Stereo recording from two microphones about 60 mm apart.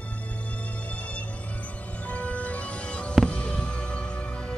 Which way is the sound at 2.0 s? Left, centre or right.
Left.